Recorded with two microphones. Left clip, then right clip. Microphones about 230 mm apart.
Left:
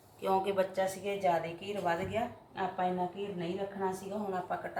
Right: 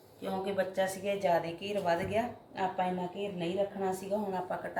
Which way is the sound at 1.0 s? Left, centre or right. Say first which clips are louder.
Right 2 dB; left.